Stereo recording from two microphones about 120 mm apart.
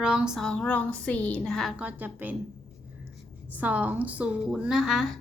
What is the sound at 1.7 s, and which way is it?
Speech, 10° right (ahead or behind).